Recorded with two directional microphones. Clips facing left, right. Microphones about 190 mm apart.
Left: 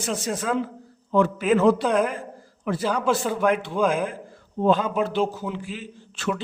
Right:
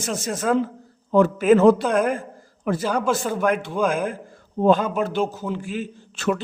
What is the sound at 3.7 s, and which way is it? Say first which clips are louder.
Speech: even; 5° right (ahead or behind).